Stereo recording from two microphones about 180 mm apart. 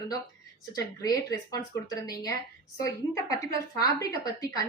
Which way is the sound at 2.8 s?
20° left (ahead or behind).